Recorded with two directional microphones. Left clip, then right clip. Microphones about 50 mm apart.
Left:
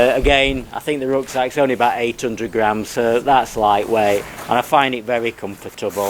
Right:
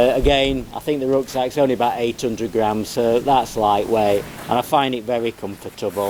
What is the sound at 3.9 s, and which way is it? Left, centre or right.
Speech, left.